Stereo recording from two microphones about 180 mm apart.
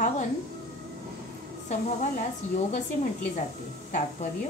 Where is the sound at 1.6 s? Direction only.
40° left (ahead or behind).